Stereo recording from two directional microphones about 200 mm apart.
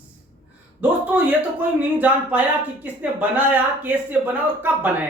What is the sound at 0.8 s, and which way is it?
Speech, 10° right (ahead or behind).